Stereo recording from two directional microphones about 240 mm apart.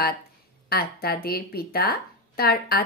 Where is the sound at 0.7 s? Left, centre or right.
Left.